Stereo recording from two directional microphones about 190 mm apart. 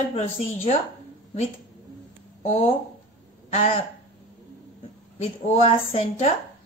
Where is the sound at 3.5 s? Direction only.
35° left (ahead or behind).